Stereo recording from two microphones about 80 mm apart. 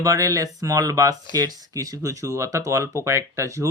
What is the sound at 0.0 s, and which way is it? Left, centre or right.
Speech, right.